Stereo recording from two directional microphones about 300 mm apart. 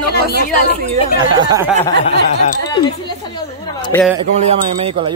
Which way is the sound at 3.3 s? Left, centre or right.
Centre.